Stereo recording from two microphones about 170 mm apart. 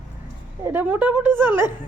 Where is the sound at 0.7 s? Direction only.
10° right (ahead or behind).